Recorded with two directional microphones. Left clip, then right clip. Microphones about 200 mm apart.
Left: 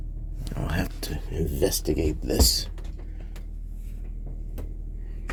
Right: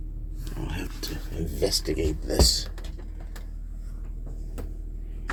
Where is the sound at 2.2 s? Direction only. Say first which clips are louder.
Right 1 dB; 55° left (ahead or behind).